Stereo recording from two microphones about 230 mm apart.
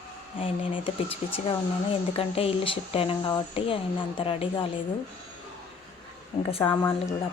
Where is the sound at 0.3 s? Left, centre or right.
Left.